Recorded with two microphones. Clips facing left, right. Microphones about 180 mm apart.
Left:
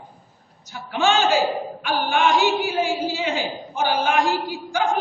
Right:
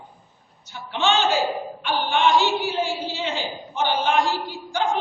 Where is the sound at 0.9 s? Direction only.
10° left (ahead or behind).